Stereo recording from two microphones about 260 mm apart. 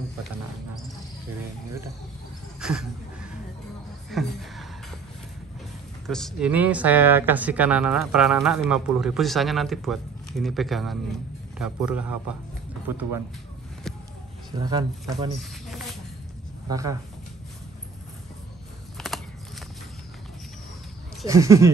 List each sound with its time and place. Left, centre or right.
2.6 s speech: centre
4.1 s a sound: centre
6.0 s speech: centre
13.9 s a sound: centre
14.6 s speech: centre
16.6 s speech: centre
18.9 s typing: centre
21.3 s speech: centre